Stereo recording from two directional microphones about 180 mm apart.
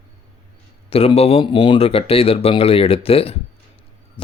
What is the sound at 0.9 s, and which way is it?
Speech, 35° left (ahead or behind).